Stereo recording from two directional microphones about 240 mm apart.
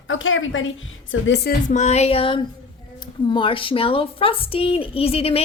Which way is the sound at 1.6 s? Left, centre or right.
Left.